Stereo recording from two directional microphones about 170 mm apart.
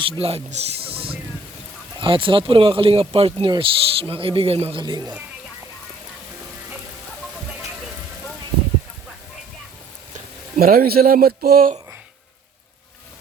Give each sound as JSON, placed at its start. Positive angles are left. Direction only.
{"t": 0.0, "sound": "speech", "side_deg": -35}
{"t": 10.6, "sound": "speech", "side_deg": -60}